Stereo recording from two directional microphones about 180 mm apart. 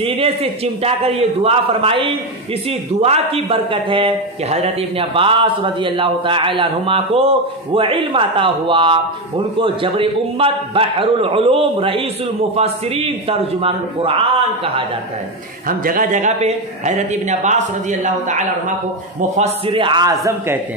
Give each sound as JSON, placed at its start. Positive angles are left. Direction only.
{"t": 0.0, "sound": "a man's voice", "side_deg": -30}
{"t": 15.8, "sound": "a man's voice", "side_deg": -50}
{"t": 19.3, "sound": "a man's voice", "side_deg": -35}